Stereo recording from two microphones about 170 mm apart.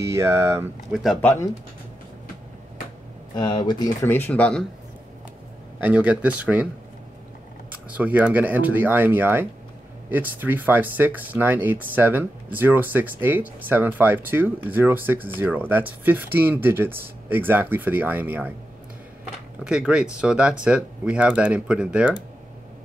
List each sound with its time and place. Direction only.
0.0 s speech: 15° right (ahead or behind)
1.2 s speech: 20° left (ahead or behind)
3.3 s speech: 25° left (ahead or behind)
4.0 s speech: 10° left (ahead or behind)
5.8 s speech: 10° right (ahead or behind)
7.9 s speech: 10° right (ahead or behind)
19.6 s speech: 5° right (ahead or behind)